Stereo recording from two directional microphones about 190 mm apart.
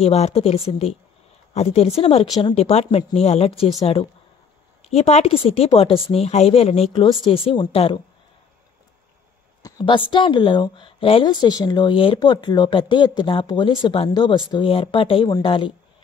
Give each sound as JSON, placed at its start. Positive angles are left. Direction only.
{"t": 0.0, "sound": "speech", "side_deg": 35}
{"t": 9.6, "sound": "a woman's voice", "side_deg": 20}